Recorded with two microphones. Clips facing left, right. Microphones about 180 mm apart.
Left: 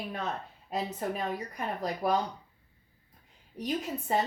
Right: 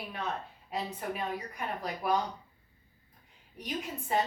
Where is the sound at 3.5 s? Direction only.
40° left (ahead or behind).